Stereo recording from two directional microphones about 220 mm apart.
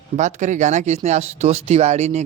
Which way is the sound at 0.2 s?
35° right (ahead or behind).